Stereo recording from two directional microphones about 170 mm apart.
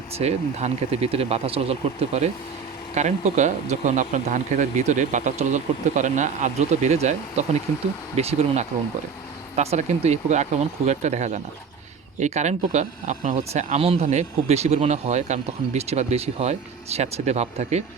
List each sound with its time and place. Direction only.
0.2 s speech: 40° right (ahead or behind)